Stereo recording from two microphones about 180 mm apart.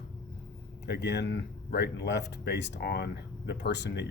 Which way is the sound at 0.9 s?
70° left (ahead or behind).